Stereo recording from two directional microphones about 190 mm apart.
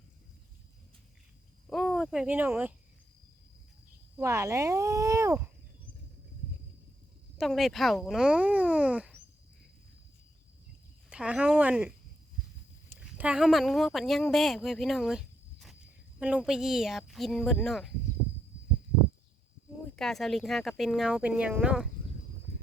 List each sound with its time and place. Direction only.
1.6 s a sound: centre (ahead or behind)
4.2 s speech: 15° right (ahead or behind)
7.3 s speech: centre (ahead or behind)
11.1 s speech: 5° right (ahead or behind)
20.0 s speech: centre (ahead or behind)